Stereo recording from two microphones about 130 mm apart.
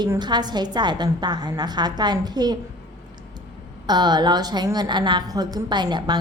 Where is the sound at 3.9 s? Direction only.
35° right (ahead or behind).